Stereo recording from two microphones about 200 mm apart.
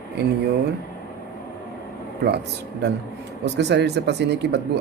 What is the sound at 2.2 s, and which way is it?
Speech, 55° right (ahead or behind).